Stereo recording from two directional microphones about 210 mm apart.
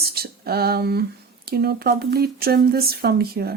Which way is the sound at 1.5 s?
50° right (ahead or behind).